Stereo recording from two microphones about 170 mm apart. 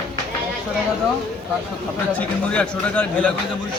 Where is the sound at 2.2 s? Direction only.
5° left (ahead or behind).